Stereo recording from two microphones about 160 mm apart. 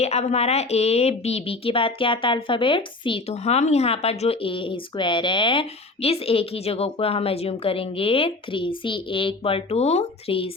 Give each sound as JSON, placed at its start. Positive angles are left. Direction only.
{"t": 0.0, "sound": "a woman's voice", "side_deg": 40}